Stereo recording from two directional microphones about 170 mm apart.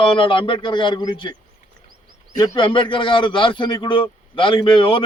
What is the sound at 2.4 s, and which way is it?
A man's voice, 25° left (ahead or behind).